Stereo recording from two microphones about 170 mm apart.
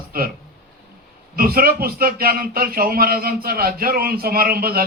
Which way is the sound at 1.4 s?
60° right (ahead or behind).